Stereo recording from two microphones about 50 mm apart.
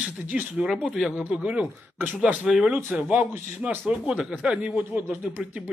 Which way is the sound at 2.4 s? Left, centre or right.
Centre.